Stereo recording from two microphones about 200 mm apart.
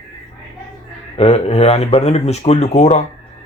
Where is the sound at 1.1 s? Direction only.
30° left (ahead or behind).